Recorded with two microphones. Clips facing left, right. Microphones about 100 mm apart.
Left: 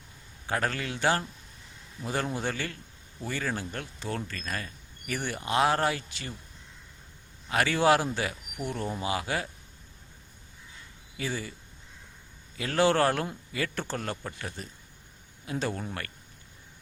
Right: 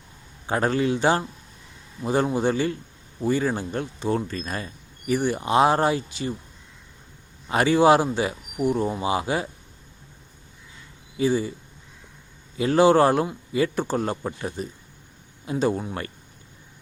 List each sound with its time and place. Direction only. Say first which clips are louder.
0.4 s speech: right 8 dB; 25° right (ahead or behind)
7.4 s speech: right 7 dB; 25° right (ahead or behind)
11.2 s speech: right 12 dB; 20° right (ahead or behind)
12.5 s a man's voice: right 8 dB; 20° right (ahead or behind)